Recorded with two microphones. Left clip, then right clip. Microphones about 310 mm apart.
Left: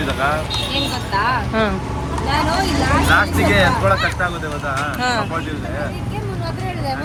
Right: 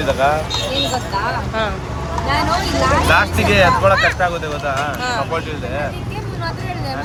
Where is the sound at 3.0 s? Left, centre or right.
Right.